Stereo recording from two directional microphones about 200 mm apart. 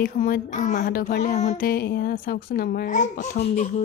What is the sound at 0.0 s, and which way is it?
Speech, 40° left (ahead or behind).